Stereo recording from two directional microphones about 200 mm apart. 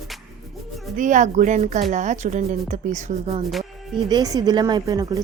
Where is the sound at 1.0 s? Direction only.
40° right (ahead or behind).